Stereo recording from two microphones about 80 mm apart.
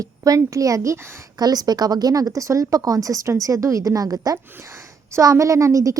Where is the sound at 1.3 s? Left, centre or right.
Right.